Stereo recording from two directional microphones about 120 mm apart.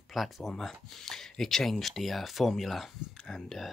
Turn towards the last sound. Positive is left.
turn(degrees=0)  # may be behind; listen again after turning